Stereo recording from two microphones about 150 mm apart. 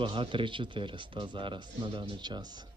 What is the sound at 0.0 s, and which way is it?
Speech, 35° right (ahead or behind).